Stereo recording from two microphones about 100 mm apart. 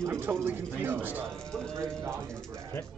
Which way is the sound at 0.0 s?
25° right (ahead or behind).